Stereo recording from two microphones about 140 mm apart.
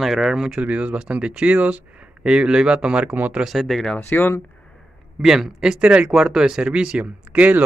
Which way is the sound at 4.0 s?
15° left (ahead or behind).